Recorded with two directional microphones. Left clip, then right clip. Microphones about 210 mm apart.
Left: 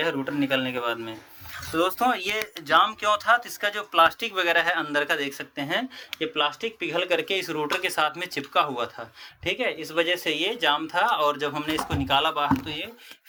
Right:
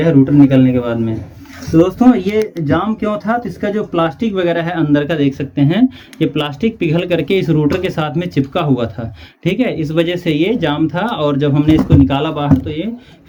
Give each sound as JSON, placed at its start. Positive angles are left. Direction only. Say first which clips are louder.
{"t": 0.0, "sound": "speech", "louder": "right 15 dB", "side_deg": 40}